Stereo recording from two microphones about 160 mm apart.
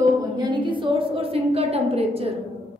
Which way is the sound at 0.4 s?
30° right (ahead or behind).